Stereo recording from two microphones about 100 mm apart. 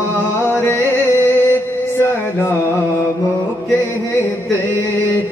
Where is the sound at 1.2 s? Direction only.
20° left (ahead or behind).